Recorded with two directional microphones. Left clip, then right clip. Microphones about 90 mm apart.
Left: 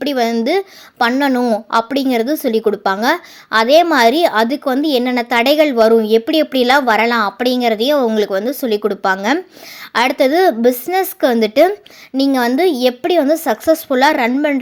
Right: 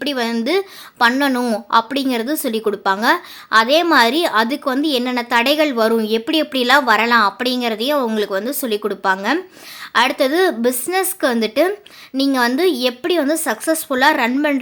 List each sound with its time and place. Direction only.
0.0 s a woman's voice: 35° left (ahead or behind)
1.3 s a woman's voice: 15° left (ahead or behind)
1.7 s a woman's voice: 35° left (ahead or behind)